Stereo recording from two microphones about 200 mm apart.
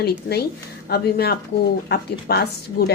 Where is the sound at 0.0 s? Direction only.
55° left (ahead or behind).